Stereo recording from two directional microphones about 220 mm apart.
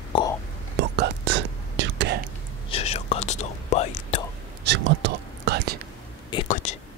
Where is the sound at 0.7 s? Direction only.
50° right (ahead or behind).